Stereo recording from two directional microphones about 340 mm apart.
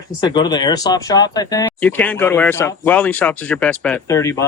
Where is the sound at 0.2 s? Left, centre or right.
Centre.